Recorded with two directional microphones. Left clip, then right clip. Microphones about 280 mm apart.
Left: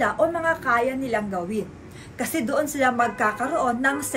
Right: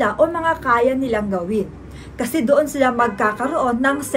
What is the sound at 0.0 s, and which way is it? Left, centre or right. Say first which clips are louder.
A woman's voice: right 4 dB; centre.